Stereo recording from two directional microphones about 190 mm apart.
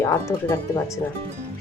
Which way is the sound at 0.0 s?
15° left (ahead or behind).